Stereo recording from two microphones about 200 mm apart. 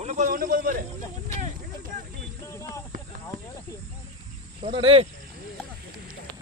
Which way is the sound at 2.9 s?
45° right (ahead or behind).